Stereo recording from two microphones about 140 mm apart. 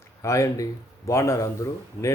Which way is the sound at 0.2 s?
20° left (ahead or behind).